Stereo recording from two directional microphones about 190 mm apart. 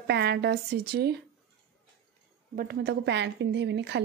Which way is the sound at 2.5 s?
55° right (ahead or behind).